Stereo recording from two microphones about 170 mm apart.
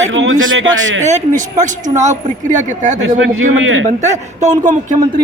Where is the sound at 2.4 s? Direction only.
45° right (ahead or behind).